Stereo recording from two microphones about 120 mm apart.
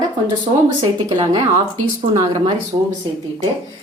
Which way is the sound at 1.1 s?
30° right (ahead or behind).